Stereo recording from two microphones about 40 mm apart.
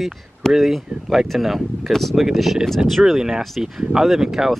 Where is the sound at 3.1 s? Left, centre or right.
Centre.